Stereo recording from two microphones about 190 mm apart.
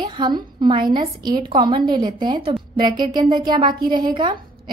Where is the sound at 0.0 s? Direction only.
25° right (ahead or behind).